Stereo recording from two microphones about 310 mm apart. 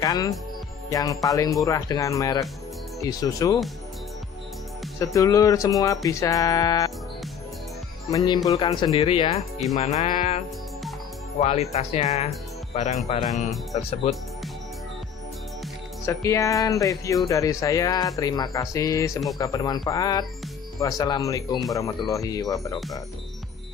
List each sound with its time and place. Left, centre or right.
0.0 s speech: centre
5.0 s speech: centre
8.1 s speech: centre
16.1 s speech: centre